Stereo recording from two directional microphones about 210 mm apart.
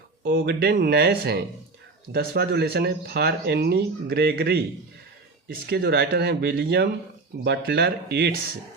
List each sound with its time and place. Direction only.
0.3 s speech: 55° right (ahead or behind)